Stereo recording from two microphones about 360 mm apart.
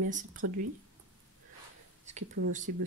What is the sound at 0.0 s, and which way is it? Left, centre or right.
Speech, right.